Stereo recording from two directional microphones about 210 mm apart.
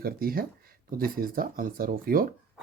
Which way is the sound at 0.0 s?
45° right (ahead or behind).